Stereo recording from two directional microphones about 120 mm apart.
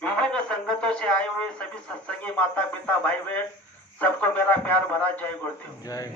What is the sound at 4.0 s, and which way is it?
A man's voice, 15° left (ahead or behind).